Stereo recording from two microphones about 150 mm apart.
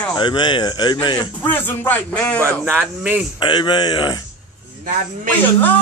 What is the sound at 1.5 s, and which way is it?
Speech, 10° left (ahead or behind).